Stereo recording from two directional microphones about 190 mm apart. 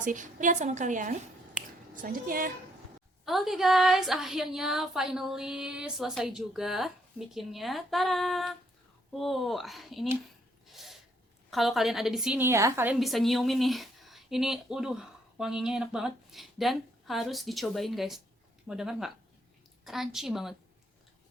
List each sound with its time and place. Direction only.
0.0 s a woman's voice: 40° right (ahead or behind)
3.2 s a woman's voice: centre (ahead or behind)
10.7 s a sound: centre (ahead or behind)
11.5 s a woman's voice: centre (ahead or behind)